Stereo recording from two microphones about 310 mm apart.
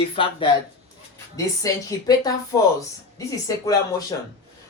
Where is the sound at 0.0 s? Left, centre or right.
Centre.